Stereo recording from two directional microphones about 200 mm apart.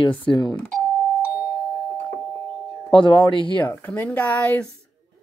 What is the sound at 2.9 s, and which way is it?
Speech, 25° left (ahead or behind).